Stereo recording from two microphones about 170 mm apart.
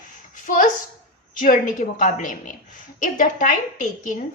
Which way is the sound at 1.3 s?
50° left (ahead or behind).